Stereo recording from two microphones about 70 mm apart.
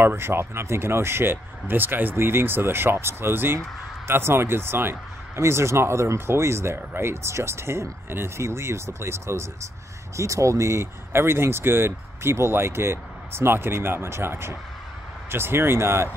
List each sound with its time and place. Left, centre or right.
0.0 s speech: right